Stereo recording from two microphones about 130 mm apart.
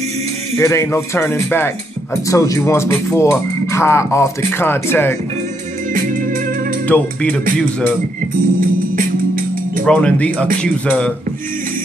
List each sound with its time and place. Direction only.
0.6 s speech: 20° left (ahead or behind)
6.9 s speech: 10° left (ahead or behind)
8.5 s music: 90° right
9.8 s speech: 10° left (ahead or behind)